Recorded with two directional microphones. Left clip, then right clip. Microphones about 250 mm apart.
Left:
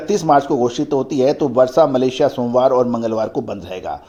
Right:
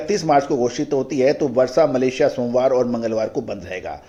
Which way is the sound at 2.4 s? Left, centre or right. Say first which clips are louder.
Left 3 dB; left.